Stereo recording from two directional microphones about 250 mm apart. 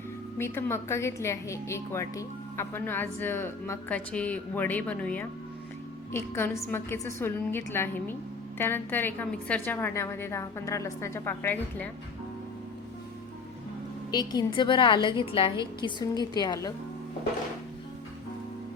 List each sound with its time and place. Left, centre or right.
0.3 s speech: centre
14.1 s a woman's voice: centre